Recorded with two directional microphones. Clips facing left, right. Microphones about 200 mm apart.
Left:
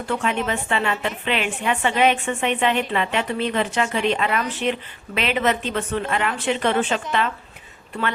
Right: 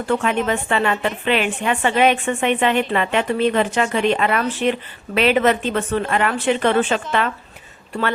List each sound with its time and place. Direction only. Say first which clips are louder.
0.1 s a woman's voice: right 4 dB; 50° right (ahead or behind)